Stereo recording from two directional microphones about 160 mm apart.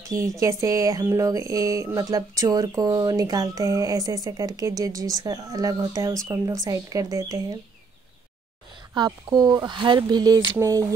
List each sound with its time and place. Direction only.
0.4 s speech: 20° right (ahead or behind)
8.9 s speech: 25° right (ahead or behind)